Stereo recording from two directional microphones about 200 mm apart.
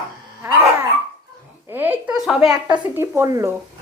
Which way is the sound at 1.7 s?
10° right (ahead or behind).